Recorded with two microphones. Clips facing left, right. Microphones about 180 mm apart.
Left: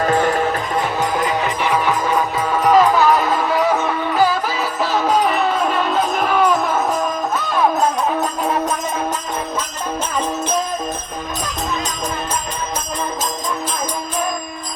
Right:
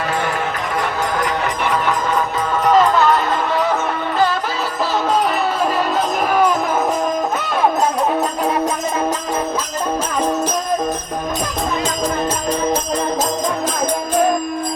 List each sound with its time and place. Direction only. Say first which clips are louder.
0.0 s music: left 5 dB; 40° left (ahead or behind)
2.6 s music: left 1 dB; 5° left (ahead or behind)